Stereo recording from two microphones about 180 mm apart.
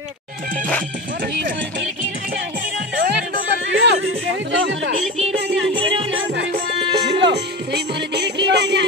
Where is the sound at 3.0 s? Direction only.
65° right (ahead or behind); by 4.9 s 90° right.